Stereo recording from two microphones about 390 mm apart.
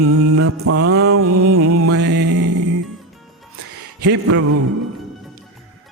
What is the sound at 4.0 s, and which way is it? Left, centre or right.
Music, right.